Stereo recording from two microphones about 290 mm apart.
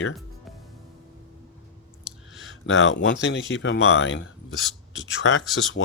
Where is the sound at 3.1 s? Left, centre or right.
Left.